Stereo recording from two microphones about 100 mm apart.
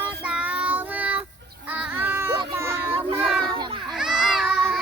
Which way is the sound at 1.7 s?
20° right (ahead or behind).